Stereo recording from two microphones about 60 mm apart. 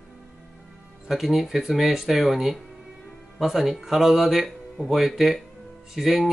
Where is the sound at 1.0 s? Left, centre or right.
Centre.